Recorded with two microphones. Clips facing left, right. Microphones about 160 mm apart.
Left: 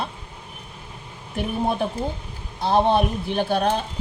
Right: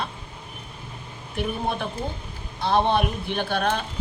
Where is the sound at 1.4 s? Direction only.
40° left (ahead or behind).